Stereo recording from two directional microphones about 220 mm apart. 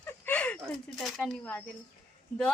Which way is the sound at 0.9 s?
Centre (ahead or behind).